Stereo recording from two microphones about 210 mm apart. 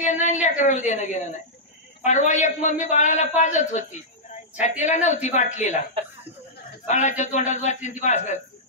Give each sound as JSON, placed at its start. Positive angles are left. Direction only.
{"t": 0.0, "sound": "a man's voice", "side_deg": 35}
{"t": 6.9, "sound": "a man's voice", "side_deg": 35}